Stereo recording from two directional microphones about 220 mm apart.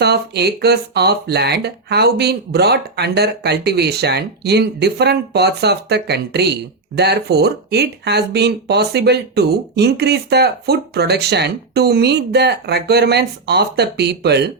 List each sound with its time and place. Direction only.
0.0 s speech: 50° right (ahead or behind)